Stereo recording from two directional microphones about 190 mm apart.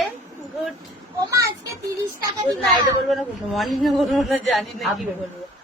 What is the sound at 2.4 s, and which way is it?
Speech, 25° right (ahead or behind).